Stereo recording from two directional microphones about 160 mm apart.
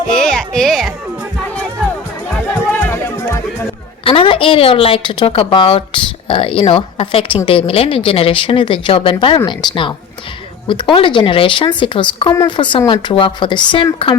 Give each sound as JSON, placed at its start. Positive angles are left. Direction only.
{"t": 0.1, "sound": "music", "side_deg": 5}
{"t": 2.9, "sound": "chatter", "side_deg": 15}
{"t": 4.0, "sound": "speech", "side_deg": 35}